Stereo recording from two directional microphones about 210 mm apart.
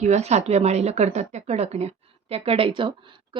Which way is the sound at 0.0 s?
35° right (ahead or behind).